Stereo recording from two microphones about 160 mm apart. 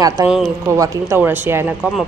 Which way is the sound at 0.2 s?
20° right (ahead or behind).